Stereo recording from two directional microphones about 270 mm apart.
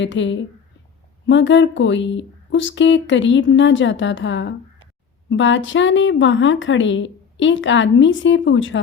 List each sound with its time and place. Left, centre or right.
0.0 s a woman's voice: left